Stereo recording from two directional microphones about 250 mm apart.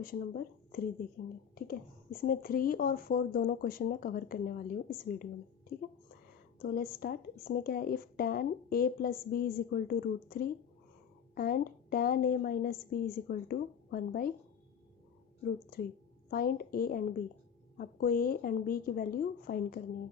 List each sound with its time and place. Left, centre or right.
0.0 s speech: left
2.1 s speech: left
6.6 s speech: left
15.4 s speech: left